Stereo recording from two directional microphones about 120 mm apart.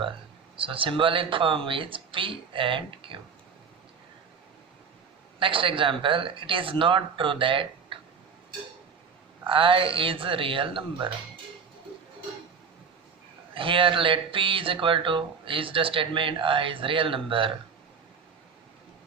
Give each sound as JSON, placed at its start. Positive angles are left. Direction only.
{"t": 0.5, "sound": "speech", "side_deg": -45}
{"t": 5.4, "sound": "speech", "side_deg": -45}
{"t": 9.5, "sound": "speech", "side_deg": -45}
{"t": 13.5, "sound": "speech", "side_deg": -45}